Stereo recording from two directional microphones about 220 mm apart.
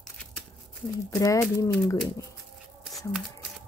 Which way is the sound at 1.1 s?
15° left (ahead or behind).